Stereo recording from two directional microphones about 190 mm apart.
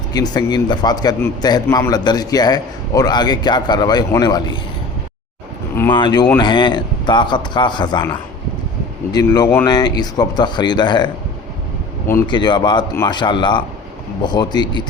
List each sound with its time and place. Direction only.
0.1 s a man's voice: 20° left (ahead or behind)
5.9 s a man's voice: 25° left (ahead or behind)
12.3 s a man's voice: 25° left (ahead or behind)